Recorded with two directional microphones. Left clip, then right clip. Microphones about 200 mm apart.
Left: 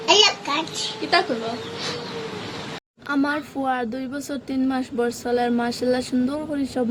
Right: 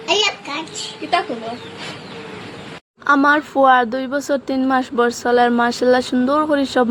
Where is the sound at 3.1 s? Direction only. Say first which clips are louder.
Right 10 dB; 15° right (ahead or behind).